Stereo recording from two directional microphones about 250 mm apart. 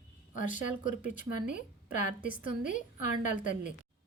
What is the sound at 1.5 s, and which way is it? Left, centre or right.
A woman's voice, left.